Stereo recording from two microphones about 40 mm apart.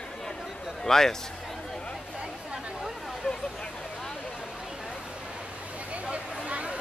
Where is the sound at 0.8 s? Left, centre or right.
Centre.